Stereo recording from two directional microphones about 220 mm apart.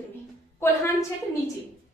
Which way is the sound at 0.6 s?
10° left (ahead or behind).